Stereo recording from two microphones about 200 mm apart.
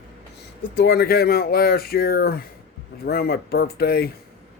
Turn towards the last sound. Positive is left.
turn(degrees=50)  # may be behind; listen again after turning